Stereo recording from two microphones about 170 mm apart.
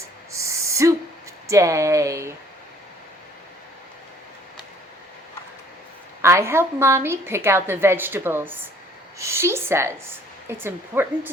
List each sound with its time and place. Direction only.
0.3 s owl: 15° right (ahead or behind)
1.5 s speech: 20° right (ahead or behind)
6.2 s a woman's voice: 15° right (ahead or behind)
9.1 s a sound: 15° right (ahead or behind)
10.6 s a woman's voice: 10° right (ahead or behind)